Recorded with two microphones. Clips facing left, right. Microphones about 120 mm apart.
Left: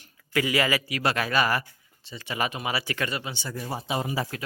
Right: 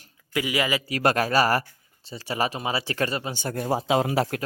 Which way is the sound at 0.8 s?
35° right (ahead or behind).